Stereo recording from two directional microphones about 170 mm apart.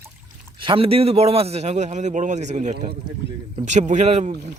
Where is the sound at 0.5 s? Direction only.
30° right (ahead or behind).